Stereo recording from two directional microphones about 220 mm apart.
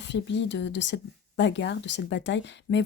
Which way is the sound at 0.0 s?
55° left (ahead or behind).